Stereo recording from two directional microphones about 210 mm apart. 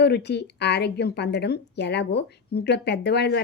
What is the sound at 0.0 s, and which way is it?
Speech, 50° left (ahead or behind).